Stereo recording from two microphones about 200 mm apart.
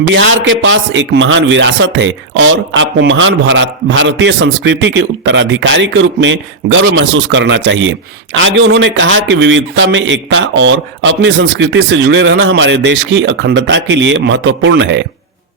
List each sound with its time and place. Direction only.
0.1 s speech: 70° right (ahead or behind)